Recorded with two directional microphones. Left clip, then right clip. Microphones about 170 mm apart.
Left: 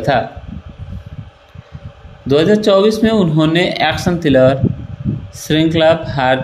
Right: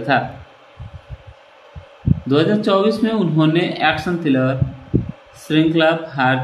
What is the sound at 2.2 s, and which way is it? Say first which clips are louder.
A man's voice: left 5 dB; 55° left (ahead or behind).